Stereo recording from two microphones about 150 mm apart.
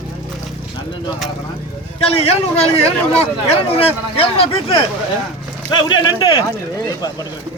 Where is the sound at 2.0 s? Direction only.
40° left (ahead or behind).